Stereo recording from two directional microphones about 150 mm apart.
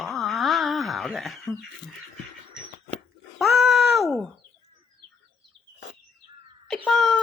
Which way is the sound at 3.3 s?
Centre (ahead or behind).